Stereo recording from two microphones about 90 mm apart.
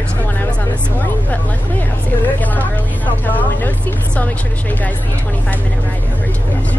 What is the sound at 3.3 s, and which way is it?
Speech, 20° left (ahead or behind).